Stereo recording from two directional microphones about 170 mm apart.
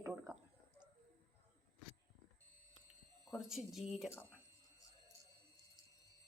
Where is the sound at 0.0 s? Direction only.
15° right (ahead or behind).